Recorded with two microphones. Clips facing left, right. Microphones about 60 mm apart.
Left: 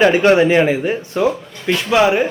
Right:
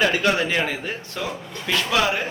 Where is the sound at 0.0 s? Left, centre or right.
Left.